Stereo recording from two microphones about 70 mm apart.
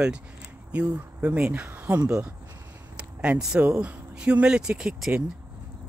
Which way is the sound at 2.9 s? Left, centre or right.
Centre.